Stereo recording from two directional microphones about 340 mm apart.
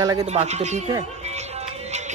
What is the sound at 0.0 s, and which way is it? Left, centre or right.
Speech, centre.